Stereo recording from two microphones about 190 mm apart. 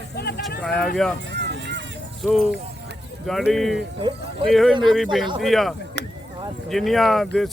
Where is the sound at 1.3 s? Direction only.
65° right (ahead or behind).